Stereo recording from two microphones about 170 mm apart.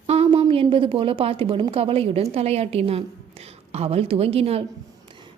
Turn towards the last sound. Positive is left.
turn(degrees=-35)  # may be behind; listen again after turning